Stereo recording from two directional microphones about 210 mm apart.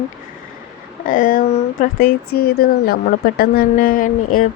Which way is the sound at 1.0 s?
40° left (ahead or behind).